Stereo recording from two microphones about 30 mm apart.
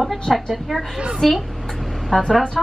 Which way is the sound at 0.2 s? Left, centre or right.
Centre.